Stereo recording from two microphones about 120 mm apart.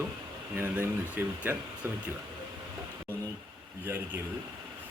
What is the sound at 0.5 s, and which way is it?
A man's voice, 15° right (ahead or behind).